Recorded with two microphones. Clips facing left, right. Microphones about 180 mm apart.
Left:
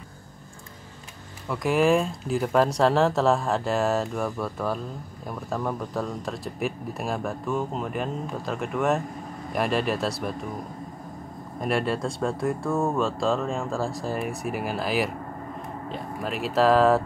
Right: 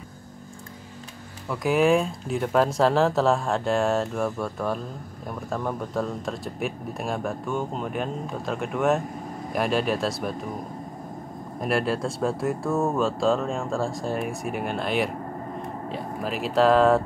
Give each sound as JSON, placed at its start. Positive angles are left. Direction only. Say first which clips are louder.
{"t": 1.5, "sound": "speech", "louder": "right 1 dB", "side_deg": 0}
{"t": 11.6, "sound": "speech", "louder": "right 1 dB", "side_deg": 0}